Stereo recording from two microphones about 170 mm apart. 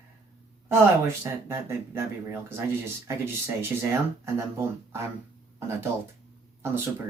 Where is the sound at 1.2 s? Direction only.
15° right (ahead or behind).